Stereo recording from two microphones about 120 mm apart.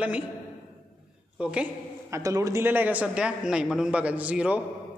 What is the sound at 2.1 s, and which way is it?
A man's voice, 25° right (ahead or behind).